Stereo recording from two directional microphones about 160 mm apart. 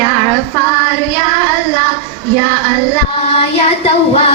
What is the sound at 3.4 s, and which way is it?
Child singing, 40° left (ahead or behind).